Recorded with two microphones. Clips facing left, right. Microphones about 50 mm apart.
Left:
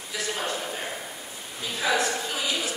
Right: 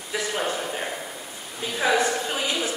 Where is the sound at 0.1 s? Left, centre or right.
Centre.